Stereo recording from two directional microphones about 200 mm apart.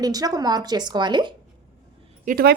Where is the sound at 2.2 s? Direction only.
45° right (ahead or behind).